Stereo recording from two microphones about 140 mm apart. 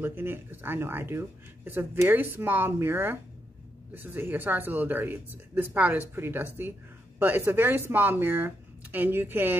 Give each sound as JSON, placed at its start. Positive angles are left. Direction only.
{"t": 0.0, "sound": "speech", "side_deg": -15}